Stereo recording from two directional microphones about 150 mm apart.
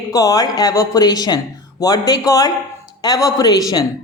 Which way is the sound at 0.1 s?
25° left (ahead or behind).